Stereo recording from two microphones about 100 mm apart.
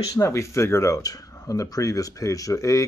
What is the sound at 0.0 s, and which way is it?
Speech, 35° left (ahead or behind).